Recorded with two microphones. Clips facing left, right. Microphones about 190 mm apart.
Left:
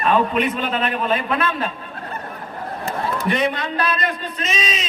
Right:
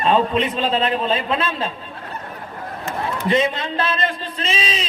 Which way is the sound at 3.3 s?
20° right (ahead or behind).